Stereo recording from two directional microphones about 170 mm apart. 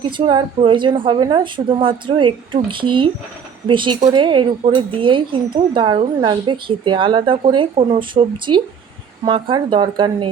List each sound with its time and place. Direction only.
0.2 s speech: 30° right (ahead or behind)